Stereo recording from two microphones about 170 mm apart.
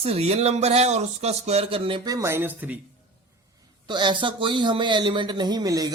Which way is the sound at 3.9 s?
25° right (ahead or behind).